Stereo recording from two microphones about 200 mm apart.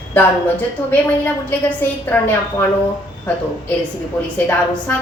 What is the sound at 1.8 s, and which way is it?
Speech, 10° left (ahead or behind).